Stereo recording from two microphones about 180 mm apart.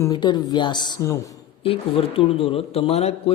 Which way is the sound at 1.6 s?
30° left (ahead or behind).